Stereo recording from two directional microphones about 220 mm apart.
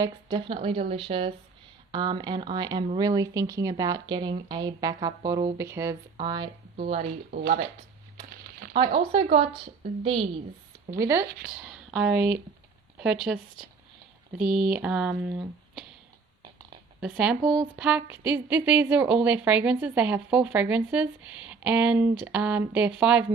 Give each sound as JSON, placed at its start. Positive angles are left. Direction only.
{"t": 0.0, "sound": "a woman's voice", "side_deg": -20}
{"t": 7.3, "sound": "speech", "side_deg": -45}
{"t": 8.7, "sound": "a woman's voice", "side_deg": -25}
{"t": 11.0, "sound": "a woman's voice", "side_deg": -10}
{"t": 16.4, "sound": "a sound", "side_deg": -20}
{"t": 17.0, "sound": "a woman's voice", "side_deg": -5}